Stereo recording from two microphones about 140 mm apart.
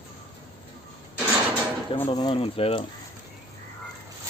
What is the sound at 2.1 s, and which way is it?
Speech, 30° left (ahead or behind).